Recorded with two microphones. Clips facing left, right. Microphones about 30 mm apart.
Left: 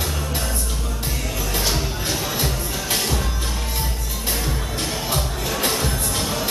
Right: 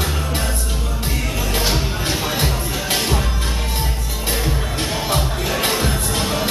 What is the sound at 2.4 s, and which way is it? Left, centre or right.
Music, centre.